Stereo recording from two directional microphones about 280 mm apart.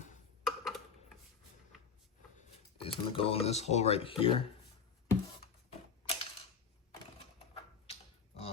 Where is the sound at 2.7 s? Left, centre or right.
Centre.